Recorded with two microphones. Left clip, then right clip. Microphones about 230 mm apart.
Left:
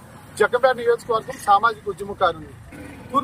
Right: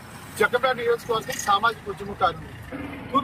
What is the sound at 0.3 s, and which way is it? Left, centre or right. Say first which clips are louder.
Speech: left 4 dB; left.